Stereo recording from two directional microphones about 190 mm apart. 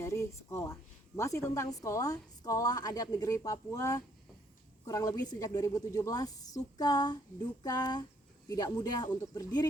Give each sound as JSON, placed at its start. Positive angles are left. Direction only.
{"t": 0.0, "sound": "a woman's voice", "side_deg": 15}